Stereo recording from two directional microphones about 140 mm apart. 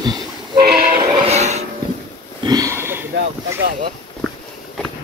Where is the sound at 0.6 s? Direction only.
90° right.